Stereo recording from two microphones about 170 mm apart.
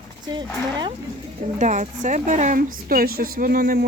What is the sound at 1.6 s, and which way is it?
A woman's voice, 45° right (ahead or behind).